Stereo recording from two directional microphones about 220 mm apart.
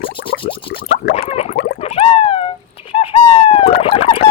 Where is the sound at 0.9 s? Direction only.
35° left (ahead or behind).